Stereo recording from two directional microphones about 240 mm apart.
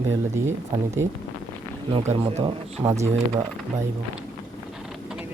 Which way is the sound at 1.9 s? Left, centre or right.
Right.